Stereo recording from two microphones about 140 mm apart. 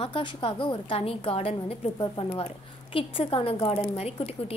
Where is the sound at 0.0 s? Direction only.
40° left (ahead or behind).